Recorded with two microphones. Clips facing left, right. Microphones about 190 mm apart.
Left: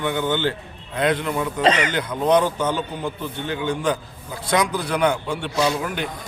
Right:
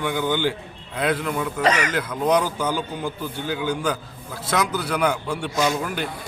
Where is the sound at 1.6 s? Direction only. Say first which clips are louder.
Left 2 dB; 25° left (ahead or behind).